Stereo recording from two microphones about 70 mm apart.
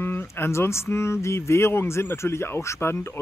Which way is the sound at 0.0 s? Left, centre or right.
Left.